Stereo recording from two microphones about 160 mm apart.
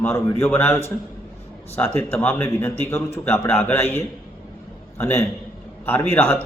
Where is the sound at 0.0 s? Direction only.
15° left (ahead or behind).